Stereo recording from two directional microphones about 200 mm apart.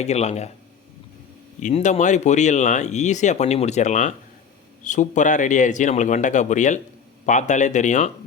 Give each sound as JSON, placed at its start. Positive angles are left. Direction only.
{"t": 0.0, "sound": "speech", "side_deg": 30}
{"t": 1.6, "sound": "speech", "side_deg": 35}